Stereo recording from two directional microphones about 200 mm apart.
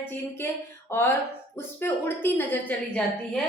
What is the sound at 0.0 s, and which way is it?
A woman's voice, 10° left (ahead or behind).